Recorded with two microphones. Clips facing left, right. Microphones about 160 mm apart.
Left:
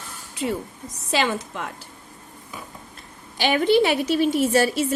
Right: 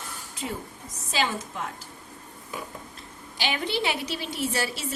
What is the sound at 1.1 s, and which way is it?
Speech, 70° left (ahead or behind).